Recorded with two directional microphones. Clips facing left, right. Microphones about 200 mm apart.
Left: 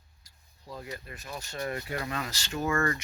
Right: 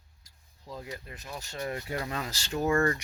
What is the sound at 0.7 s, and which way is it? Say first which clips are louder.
Speech: even; 20° right (ahead or behind).